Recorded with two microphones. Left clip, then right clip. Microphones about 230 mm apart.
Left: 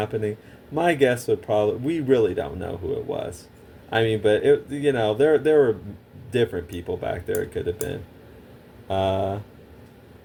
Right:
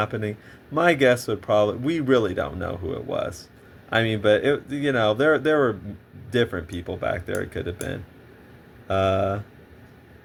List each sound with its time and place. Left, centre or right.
0.0 s speech: right